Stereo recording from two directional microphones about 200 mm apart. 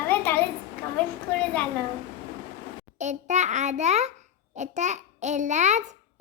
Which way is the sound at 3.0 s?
35° right (ahead or behind).